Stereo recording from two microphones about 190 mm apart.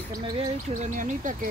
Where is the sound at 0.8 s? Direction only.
45° right (ahead or behind).